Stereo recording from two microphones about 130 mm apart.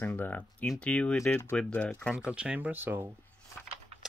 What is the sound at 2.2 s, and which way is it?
Speech, 5° right (ahead or behind).